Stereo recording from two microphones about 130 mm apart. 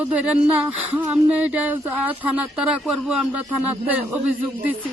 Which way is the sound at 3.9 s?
10° right (ahead or behind).